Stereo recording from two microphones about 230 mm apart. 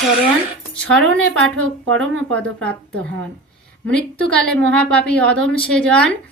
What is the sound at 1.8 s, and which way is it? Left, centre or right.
Speech, right.